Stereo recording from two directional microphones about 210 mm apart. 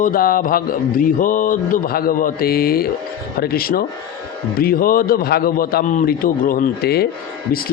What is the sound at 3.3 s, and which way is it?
A man's voice, 45° left (ahead or behind).